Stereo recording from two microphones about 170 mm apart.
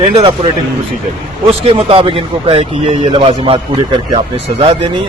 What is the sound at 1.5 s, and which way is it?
A man's voice, 35° right (ahead or behind).